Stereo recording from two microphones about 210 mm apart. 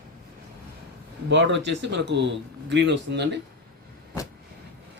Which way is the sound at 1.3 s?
60° right (ahead or behind).